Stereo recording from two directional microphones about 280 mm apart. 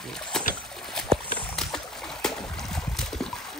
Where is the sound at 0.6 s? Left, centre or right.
Centre.